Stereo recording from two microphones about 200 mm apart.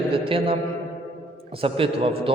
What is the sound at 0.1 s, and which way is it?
Speech, 25° right (ahead or behind).